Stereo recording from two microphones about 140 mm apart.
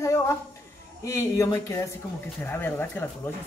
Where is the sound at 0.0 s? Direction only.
20° left (ahead or behind).